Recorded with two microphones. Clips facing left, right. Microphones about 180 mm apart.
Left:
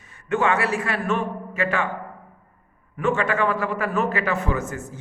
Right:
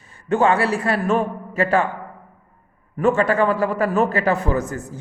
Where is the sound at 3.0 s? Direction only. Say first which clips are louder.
Right 5 dB; 35° right (ahead or behind).